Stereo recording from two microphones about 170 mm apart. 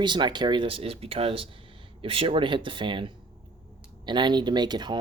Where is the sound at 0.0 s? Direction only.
25° right (ahead or behind).